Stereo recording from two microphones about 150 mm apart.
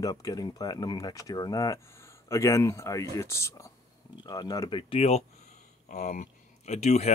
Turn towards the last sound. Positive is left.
turn(degrees=50)  # may be behind; listen again after turning